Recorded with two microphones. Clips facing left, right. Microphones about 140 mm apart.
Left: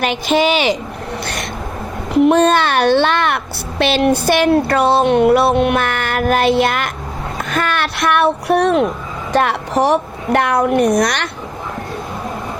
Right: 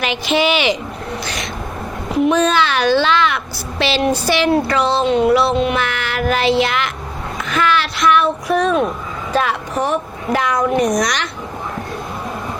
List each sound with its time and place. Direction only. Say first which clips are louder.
0.0 s speech: left 2 dB; 45° left (ahead or behind)
1.2 s a child's voice: left 1 dB; 55° left (ahead or behind)
7.3 s a sound: right 2 dB; 50° left (ahead or behind); by 8.8 s 65° left (ahead or behind)
9.3 s a woman's voice: left 3 dB; 65° left (ahead or behind)
10.3 s a child's voice: left 3 dB; 60° left (ahead or behind)